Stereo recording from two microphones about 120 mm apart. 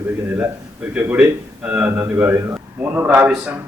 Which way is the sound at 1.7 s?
15° right (ahead or behind).